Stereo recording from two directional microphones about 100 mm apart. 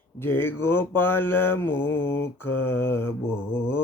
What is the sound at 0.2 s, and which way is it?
Mantra, 20° left (ahead or behind).